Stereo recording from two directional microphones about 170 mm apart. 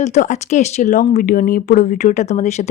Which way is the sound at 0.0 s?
45° left (ahead or behind).